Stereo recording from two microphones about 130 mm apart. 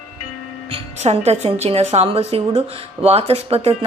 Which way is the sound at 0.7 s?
50° right (ahead or behind).